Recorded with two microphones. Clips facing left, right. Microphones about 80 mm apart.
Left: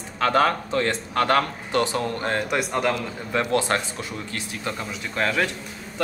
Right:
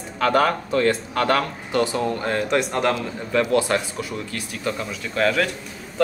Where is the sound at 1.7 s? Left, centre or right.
Right.